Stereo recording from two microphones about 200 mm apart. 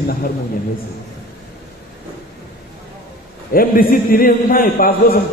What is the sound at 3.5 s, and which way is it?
A man's voice, 45° left (ahead or behind).